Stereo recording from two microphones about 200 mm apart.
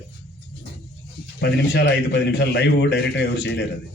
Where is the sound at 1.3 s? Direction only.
55° left (ahead or behind).